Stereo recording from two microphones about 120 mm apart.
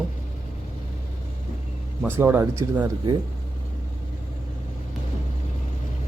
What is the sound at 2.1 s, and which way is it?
Speech, 20° right (ahead or behind).